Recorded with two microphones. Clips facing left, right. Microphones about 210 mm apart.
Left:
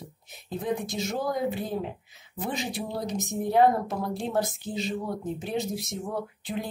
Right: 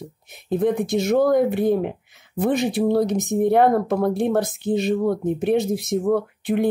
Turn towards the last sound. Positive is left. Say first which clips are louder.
# right 13 dB
turn(degrees=-65)  # may be behind; listen again after turning